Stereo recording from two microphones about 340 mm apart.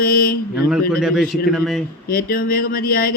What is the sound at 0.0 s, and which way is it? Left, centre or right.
Mantra, left.